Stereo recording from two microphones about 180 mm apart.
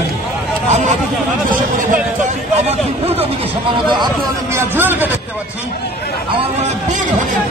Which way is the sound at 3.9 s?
25° right (ahead or behind).